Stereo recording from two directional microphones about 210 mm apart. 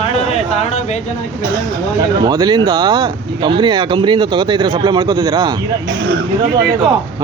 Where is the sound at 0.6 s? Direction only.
30° left (ahead or behind).